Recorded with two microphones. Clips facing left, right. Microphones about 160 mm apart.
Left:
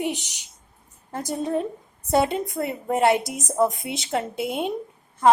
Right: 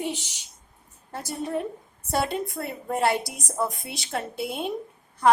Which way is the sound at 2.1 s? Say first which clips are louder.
Left 5 dB; 20° left (ahead or behind).